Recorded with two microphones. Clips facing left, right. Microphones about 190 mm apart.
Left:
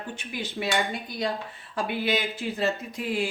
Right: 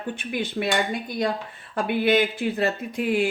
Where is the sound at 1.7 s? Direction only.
55° right (ahead or behind).